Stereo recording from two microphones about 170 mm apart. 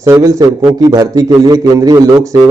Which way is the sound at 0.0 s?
15° right (ahead or behind).